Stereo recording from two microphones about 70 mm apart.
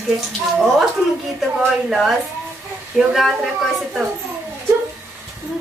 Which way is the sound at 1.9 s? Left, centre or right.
Centre.